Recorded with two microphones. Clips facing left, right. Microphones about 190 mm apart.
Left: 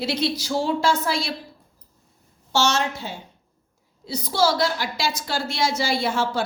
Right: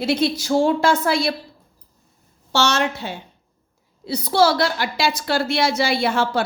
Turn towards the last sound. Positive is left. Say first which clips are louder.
# right 3 dB
turn(degrees=-65)  # may be behind; listen again after turning